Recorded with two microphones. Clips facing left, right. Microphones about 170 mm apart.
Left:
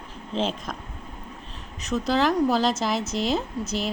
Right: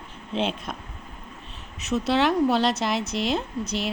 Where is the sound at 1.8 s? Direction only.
5° right (ahead or behind).